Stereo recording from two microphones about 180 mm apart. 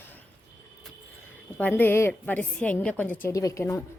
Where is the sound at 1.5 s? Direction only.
10° left (ahead or behind).